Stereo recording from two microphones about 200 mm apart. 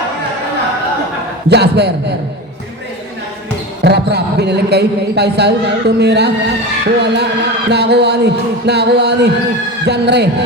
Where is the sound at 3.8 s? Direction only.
55° right (ahead or behind).